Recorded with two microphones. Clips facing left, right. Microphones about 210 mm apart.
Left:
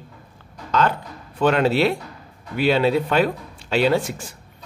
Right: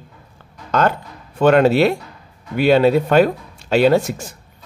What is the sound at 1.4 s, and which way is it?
Speech, 50° right (ahead or behind).